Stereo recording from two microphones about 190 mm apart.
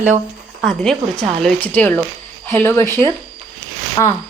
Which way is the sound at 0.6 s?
Centre (ahead or behind).